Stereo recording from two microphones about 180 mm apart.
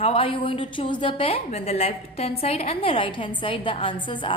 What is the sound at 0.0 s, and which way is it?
A woman's voice, 30° left (ahead or behind).